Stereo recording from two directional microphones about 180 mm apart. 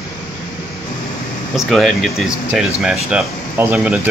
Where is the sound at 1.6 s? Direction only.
Centre (ahead or behind).